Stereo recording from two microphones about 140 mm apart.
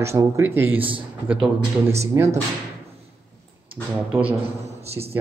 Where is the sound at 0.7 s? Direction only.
40° right (ahead or behind).